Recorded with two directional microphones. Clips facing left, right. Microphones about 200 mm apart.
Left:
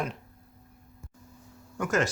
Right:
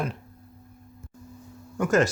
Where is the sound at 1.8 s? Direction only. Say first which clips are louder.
Right 5 dB; 35° right (ahead or behind).